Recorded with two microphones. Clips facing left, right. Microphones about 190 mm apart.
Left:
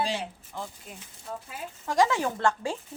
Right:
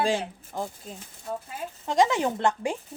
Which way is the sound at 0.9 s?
35° right (ahead or behind).